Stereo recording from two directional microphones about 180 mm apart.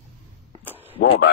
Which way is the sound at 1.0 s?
90° left.